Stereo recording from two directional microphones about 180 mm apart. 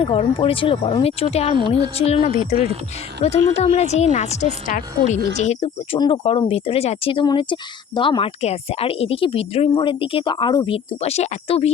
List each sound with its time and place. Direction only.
0.0 s a woman's voice: 30° left (ahead or behind)
11.0 s speech: 35° left (ahead or behind)